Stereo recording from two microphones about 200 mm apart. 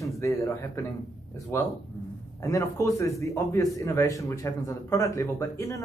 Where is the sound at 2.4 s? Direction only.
15° left (ahead or behind).